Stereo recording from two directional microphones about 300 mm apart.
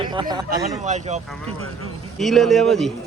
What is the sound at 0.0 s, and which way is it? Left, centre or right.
Speech, centre.